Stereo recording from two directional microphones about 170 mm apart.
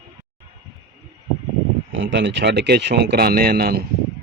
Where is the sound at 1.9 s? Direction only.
90° right; by 3.8 s 65° right (ahead or behind).